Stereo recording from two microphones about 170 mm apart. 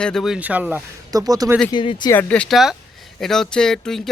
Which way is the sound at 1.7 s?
25° left (ahead or behind).